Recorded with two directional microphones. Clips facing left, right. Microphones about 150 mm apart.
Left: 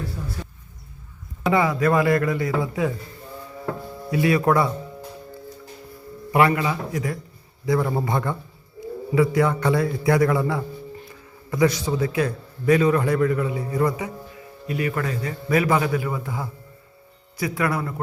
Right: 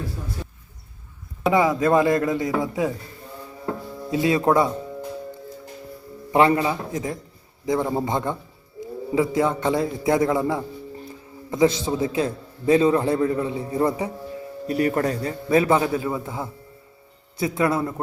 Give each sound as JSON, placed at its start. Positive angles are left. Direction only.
{"t": 1.5, "sound": "a man's voice", "side_deg": -20}
{"t": 4.1, "sound": "a man's voice", "side_deg": -20}
{"t": 6.3, "sound": "a man's voice", "side_deg": -25}
{"t": 14.7, "sound": "a man's voice", "side_deg": -40}